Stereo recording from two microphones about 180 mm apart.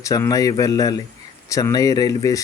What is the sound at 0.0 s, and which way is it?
Speech, 20° left (ahead or behind).